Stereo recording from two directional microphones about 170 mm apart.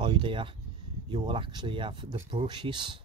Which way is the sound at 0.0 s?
30° right (ahead or behind).